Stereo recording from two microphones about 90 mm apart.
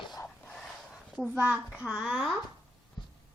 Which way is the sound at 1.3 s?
25° right (ahead or behind).